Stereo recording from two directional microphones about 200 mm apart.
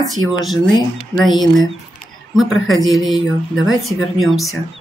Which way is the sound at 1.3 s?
20° left (ahead or behind).